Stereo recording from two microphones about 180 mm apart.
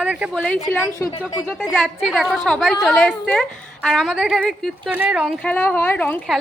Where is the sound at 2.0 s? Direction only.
Centre (ahead or behind).